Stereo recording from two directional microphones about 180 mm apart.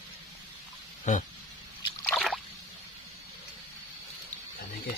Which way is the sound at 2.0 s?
Centre (ahead or behind).